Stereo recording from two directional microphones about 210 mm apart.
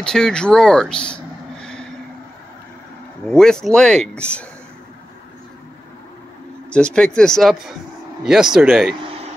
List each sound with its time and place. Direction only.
0.0 s speech: 5° left (ahead or behind)
3.3 s speech: 5° left (ahead or behind)
6.7 s speech: 5° left (ahead or behind)
9.0 s a sound: 25° right (ahead or behind)